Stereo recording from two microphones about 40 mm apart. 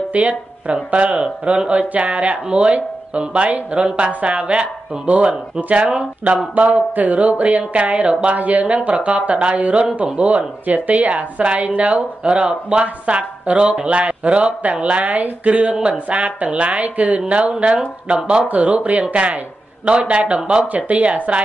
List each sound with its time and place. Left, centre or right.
0.1 s speech: right
8.4 s speech: right
15.7 s speech: right
17.3 s speech: right